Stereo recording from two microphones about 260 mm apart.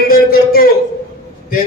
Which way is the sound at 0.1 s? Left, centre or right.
Left.